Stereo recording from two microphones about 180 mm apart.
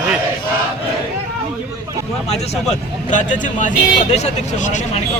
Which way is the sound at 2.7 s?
45° left (ahead or behind).